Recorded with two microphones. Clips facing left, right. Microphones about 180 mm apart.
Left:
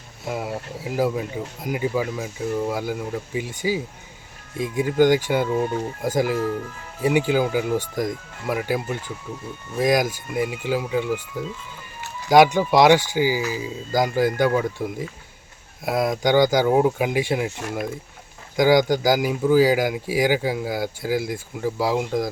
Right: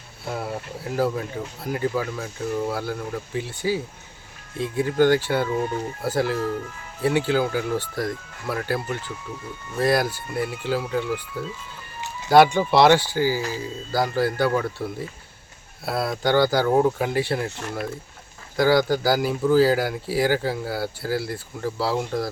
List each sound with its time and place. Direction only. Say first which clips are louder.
0.3 s speech: left 1 dB; 10° left (ahead or behind)